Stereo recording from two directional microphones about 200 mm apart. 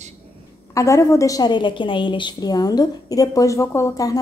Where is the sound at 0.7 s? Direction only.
15° left (ahead or behind).